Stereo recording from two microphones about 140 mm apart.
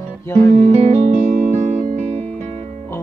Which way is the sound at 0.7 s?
50° right (ahead or behind).